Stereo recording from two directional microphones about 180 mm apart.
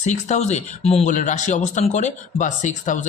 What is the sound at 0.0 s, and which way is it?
Speech, 40° left (ahead or behind).